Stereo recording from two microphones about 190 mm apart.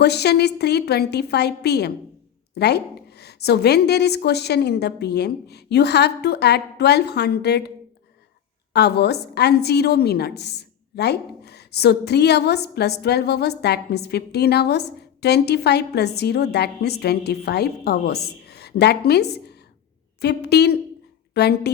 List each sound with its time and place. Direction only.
0.0 s a woman's voice: 60° left (ahead or behind)
8.7 s a woman's voice: 60° left (ahead or behind)